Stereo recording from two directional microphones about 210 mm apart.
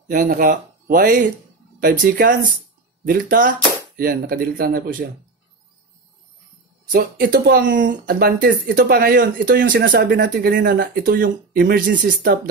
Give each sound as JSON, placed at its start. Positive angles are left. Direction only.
{"t": 0.1, "sound": "speech", "side_deg": -40}
{"t": 6.9, "sound": "speech", "side_deg": -45}
{"t": 7.8, "sound": "speech", "side_deg": -40}